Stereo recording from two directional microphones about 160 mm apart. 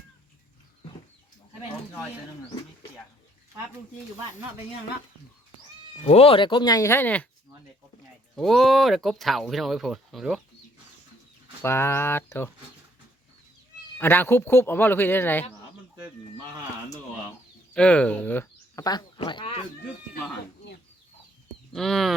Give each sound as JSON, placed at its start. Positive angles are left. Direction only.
{"t": 6.1, "sound": "speech", "side_deg": 40}
{"t": 8.4, "sound": "speech", "side_deg": 0}
{"t": 11.6, "sound": "a man's voice", "side_deg": 15}
{"t": 14.0, "sound": "a man's voice", "side_deg": 15}
{"t": 17.7, "sound": "a man's voice", "side_deg": 5}
{"t": 18.8, "sound": "speech", "side_deg": 25}
{"t": 21.7, "sound": "speech", "side_deg": 0}